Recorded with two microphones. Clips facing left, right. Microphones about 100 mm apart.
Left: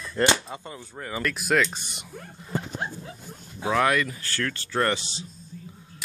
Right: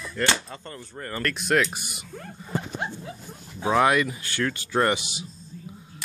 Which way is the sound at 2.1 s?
5° left (ahead or behind).